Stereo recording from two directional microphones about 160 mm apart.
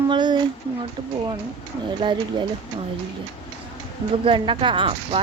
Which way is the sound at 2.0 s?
30° right (ahead or behind).